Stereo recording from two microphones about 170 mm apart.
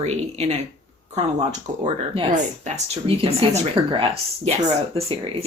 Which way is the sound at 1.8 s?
35° right (ahead or behind).